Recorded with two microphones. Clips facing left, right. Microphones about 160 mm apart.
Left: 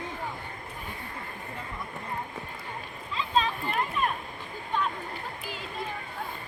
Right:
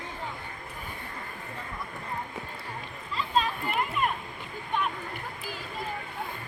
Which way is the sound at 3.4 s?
5° right (ahead or behind).